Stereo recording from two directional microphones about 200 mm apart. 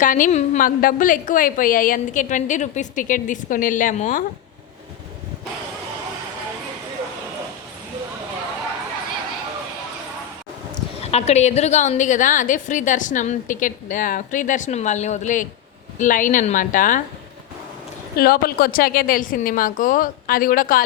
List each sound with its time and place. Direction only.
0.0 s a woman's voice: 40° left (ahead or behind)
11.0 s a woman's voice: 30° left (ahead or behind)
18.2 s a woman's voice: 50° left (ahead or behind)